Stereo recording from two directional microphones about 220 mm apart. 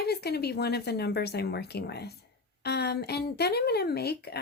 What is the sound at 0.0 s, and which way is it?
A woman's voice, 45° left (ahead or behind).